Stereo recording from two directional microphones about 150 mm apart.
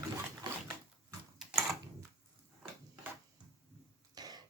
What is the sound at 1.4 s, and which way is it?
Typing, centre (ahead or behind).